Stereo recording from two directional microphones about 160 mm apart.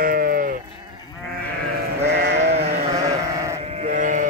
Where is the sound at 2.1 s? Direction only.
90° right.